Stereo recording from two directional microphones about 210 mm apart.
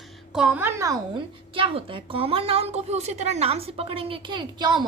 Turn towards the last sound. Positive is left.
turn(degrees=-20)  # may be behind; listen again after turning